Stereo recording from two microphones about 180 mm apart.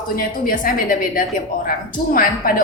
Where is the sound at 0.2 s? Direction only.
50° left (ahead or behind).